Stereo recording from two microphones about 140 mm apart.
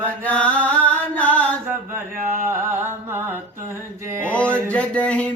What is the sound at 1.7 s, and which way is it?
Mantra, 20° right (ahead or behind).